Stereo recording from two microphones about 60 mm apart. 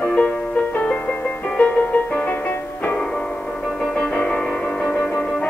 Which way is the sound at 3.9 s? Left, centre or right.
Centre.